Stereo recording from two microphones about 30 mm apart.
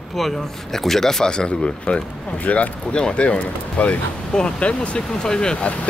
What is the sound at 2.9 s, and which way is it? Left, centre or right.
Speech, left.